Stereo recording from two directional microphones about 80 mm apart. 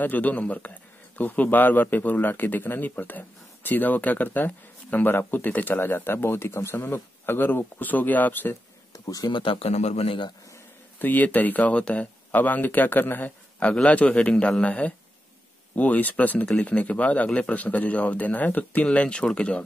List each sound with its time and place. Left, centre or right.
0.0 s a man's voice: left
8.9 s speech: left
9.3 s speech: left
11.0 s a man's voice: left